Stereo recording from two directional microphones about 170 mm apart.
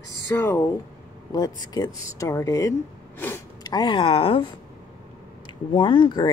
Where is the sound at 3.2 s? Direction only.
15° left (ahead or behind).